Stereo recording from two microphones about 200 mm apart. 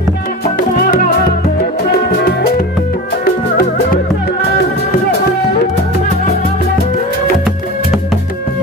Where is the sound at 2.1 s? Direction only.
55° left (ahead or behind).